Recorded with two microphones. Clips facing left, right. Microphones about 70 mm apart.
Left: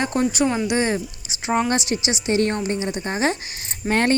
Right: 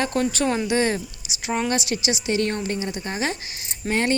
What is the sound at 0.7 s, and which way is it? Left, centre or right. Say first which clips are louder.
A woman's voice: even; left.